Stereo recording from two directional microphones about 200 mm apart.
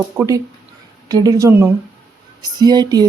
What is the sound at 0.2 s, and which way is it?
A woman's voice, 15° right (ahead or behind).